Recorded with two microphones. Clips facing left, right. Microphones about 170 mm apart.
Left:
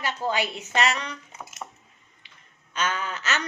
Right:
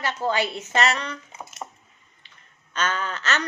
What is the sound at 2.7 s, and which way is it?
Speech, 10° left (ahead or behind).